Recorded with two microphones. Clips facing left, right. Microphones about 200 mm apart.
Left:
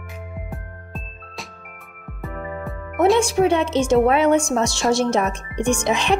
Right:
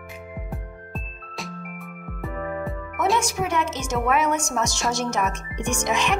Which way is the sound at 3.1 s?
30° left (ahead or behind).